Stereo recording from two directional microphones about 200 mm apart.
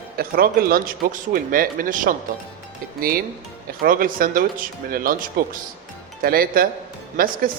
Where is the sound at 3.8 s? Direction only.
45° right (ahead or behind).